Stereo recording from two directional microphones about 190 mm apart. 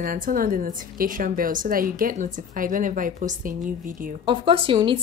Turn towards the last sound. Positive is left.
turn(degrees=-25)  # may be behind; listen again after turning